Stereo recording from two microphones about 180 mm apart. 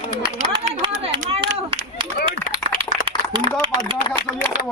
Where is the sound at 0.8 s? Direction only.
30° right (ahead or behind).